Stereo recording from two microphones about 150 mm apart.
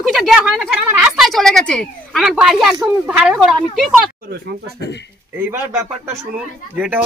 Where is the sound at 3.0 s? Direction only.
5° right (ahead or behind).